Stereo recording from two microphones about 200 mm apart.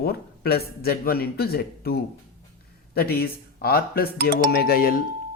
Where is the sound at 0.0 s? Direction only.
50° left (ahead or behind).